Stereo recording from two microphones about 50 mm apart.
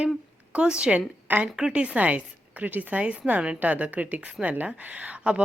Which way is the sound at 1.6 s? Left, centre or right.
Centre.